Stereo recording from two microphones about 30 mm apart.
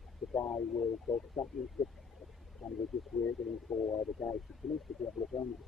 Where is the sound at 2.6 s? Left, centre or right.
Centre.